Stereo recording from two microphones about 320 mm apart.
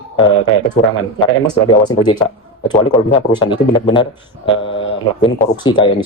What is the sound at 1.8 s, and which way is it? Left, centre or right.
Speech, centre.